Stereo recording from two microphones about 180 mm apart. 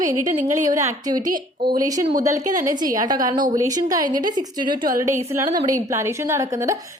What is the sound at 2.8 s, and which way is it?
Speech, 20° right (ahead or behind).